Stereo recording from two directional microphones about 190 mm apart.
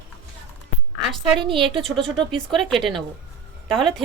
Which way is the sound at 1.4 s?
25° right (ahead or behind).